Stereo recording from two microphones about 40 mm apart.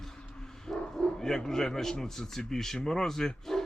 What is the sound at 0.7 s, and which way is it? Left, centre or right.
Bow-wow, centre.